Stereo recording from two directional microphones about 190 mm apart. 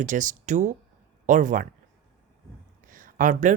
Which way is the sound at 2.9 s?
45° right (ahead or behind).